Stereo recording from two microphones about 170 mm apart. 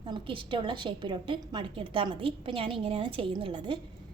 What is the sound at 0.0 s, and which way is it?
A woman's voice, 30° right (ahead or behind).